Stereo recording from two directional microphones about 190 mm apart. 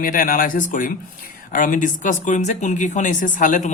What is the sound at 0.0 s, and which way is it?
Speech, 45° left (ahead or behind).